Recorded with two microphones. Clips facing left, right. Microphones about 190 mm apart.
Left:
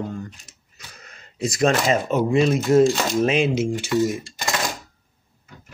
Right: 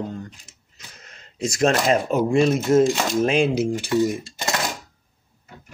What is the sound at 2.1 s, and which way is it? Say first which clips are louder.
Speech: left 1 dB; centre (ahead or behind).